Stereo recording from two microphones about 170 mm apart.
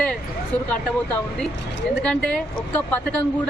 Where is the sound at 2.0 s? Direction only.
5° left (ahead or behind).